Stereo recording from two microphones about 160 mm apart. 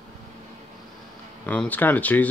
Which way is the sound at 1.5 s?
10° left (ahead or behind).